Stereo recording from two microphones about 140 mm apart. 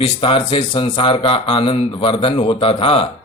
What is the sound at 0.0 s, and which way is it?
A man's voice, 40° left (ahead or behind).